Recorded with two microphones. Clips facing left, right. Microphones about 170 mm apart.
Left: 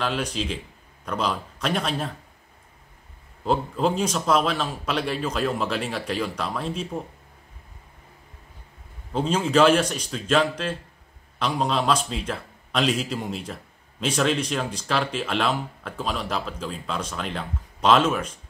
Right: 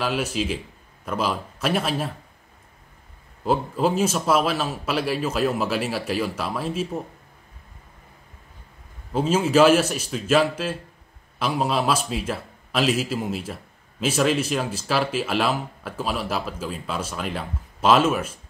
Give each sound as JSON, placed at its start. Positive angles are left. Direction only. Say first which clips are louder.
{"t": 0.0, "sound": "a man's voice", "louder": "right 2 dB", "side_deg": -5}
{"t": 3.4, "sound": "a man's voice", "louder": "right 1 dB", "side_deg": -5}
{"t": 9.1, "sound": "a man's voice", "louder": "right 2 dB", "side_deg": -5}